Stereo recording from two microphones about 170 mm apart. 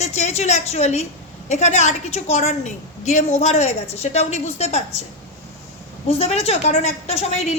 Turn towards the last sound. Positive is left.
turn(degrees=40)  # may be behind; listen again after turning